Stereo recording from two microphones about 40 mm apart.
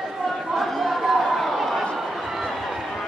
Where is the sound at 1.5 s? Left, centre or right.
Centre.